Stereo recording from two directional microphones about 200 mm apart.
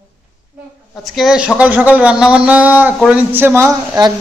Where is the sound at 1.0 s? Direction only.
Centre (ahead or behind).